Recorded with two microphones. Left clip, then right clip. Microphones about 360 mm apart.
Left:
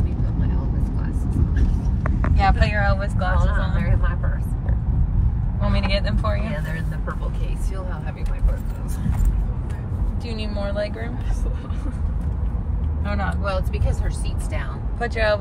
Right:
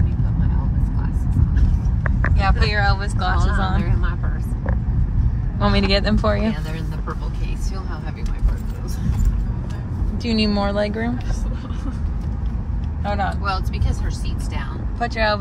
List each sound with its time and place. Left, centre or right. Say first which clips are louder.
2.3 s speech: left 2 dB; centre
3.3 s speech: right 3 dB; centre
5.6 s speech: right 6 dB; right
10.2 s speech: right 9 dB; centre
13.0 s speech: right 5 dB; centre
15.0 s speech: right 1 dB; centre